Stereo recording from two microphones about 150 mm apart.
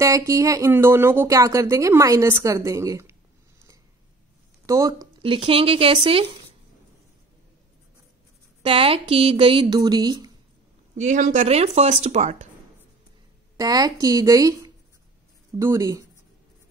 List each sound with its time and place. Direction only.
0.0 s speech: 20° right (ahead or behind)
4.6 s speech: 20° right (ahead or behind)
5.2 s speech: 40° right (ahead or behind)
8.6 s speech: 40° right (ahead or behind)
11.0 s speech: 55° right (ahead or behind)
13.6 s speech: 25° right (ahead or behind)